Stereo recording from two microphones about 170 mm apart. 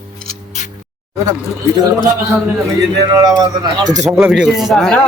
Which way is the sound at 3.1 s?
20° right (ahead or behind).